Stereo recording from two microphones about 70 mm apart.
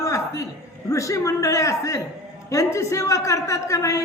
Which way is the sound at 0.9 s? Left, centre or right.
Left.